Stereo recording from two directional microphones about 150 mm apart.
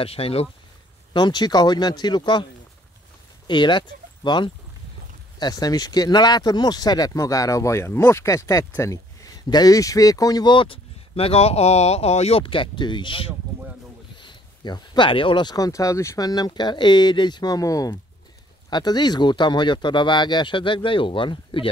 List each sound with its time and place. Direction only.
0.0 s speech: 40° left (ahead or behind)
1.1 s speech: 30° left (ahead or behind)
3.4 s speech: 30° left (ahead or behind)